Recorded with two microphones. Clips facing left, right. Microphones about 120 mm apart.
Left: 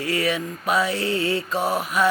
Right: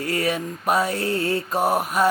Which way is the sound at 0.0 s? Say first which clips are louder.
Even; 45° right (ahead or behind).